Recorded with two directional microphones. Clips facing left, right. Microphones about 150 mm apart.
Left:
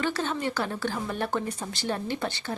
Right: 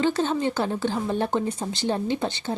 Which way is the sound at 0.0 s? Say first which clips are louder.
Right 6 dB; 25° right (ahead or behind).